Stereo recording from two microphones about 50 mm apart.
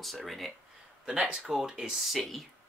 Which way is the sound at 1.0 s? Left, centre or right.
Right.